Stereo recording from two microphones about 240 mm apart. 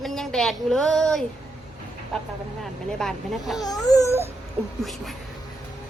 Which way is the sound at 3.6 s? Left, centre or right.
Centre.